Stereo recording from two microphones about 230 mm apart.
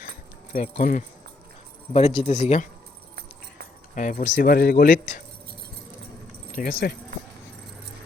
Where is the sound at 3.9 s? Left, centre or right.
Left.